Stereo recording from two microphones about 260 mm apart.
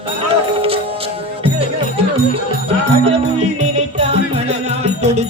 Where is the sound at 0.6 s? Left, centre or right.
Right.